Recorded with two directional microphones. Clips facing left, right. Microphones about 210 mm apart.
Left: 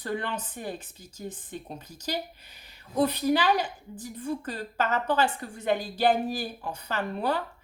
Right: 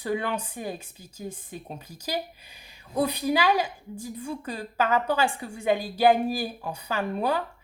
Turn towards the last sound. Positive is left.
turn(degrees=-10)  # may be behind; listen again after turning